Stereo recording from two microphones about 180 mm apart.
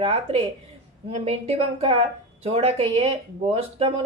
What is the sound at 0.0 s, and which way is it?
Speech, 35° right (ahead or behind).